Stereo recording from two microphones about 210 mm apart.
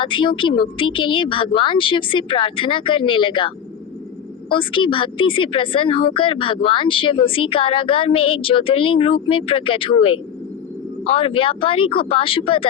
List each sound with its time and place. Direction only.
0.0 s speech: 25° left (ahead or behind)